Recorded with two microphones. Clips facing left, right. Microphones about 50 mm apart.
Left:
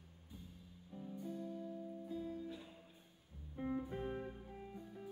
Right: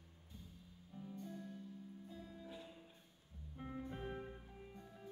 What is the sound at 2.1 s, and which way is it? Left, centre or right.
Music, left.